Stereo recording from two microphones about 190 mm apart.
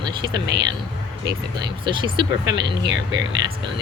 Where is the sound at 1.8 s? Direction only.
25° right (ahead or behind).